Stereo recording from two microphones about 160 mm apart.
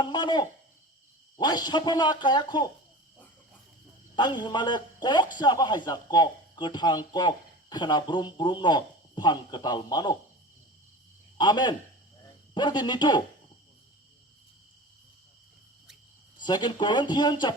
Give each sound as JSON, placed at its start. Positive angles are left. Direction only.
{"t": 0.0, "sound": "a sound", "side_deg": 25}
{"t": 1.4, "sound": "a man's voice", "side_deg": 25}
{"t": 4.1, "sound": "a man's voice", "side_deg": 25}
{"t": 11.3, "sound": "a man's voice", "side_deg": 25}
{"t": 16.4, "sound": "a man's voice", "side_deg": 25}